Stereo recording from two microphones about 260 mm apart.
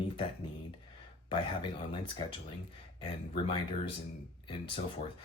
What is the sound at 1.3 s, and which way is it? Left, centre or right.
Speech, centre.